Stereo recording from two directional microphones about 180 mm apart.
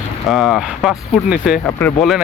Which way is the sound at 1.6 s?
10° left (ahead or behind).